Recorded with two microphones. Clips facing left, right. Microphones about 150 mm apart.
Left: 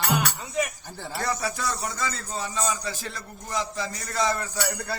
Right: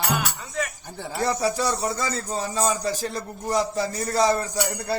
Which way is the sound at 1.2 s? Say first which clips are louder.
Right 6 dB; 30° right (ahead or behind).